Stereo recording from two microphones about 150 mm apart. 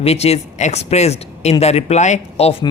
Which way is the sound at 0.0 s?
45° left (ahead or behind).